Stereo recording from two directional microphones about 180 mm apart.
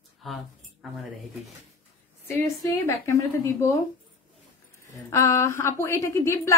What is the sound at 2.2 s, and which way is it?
A woman's voice, 15° left (ahead or behind).